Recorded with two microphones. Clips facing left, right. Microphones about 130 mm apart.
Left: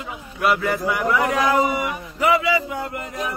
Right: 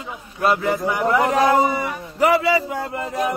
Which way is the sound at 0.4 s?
25° right (ahead or behind).